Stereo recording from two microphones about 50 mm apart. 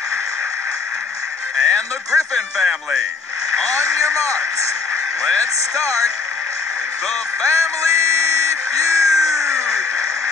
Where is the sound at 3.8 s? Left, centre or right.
Right.